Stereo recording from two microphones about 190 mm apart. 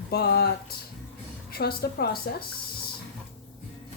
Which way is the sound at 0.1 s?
55° left (ahead or behind).